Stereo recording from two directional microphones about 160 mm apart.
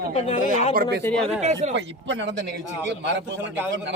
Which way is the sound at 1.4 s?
45° right (ahead or behind).